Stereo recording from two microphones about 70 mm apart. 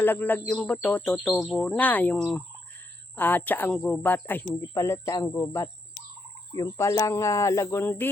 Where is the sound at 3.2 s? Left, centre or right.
Left.